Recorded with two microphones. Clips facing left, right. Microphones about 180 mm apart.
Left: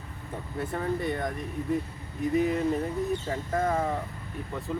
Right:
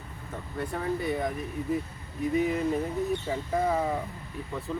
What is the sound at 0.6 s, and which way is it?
Speech, centre (ahead or behind).